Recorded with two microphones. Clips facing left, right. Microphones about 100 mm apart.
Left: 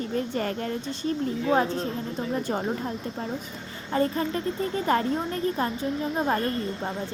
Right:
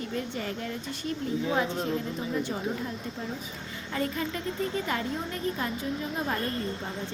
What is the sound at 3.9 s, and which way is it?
A woman's voice, 35° left (ahead or behind).